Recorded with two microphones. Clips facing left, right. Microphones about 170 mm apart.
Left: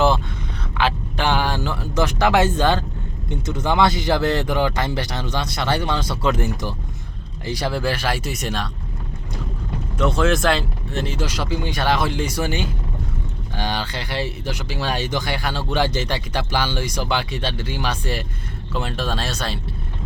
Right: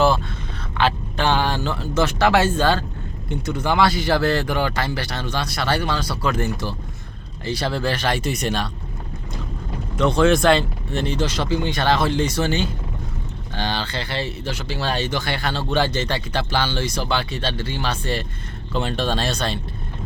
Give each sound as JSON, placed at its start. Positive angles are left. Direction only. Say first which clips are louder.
{"t": 0.8, "sound": "speech", "louder": "right 1 dB", "side_deg": 10}
{"t": 10.0, "sound": "speech", "louder": "right 3 dB", "side_deg": 5}